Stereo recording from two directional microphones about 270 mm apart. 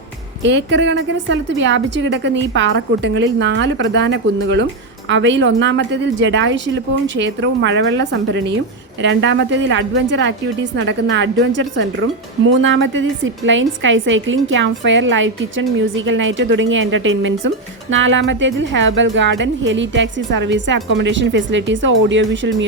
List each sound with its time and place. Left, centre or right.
0.4 s a woman's voice: right